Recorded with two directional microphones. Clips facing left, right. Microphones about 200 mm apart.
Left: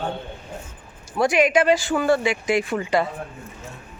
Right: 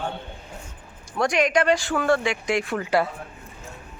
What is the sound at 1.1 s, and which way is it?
A woman's voice, 5° left (ahead or behind).